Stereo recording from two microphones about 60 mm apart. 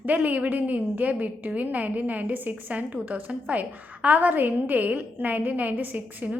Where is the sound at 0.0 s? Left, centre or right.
Right.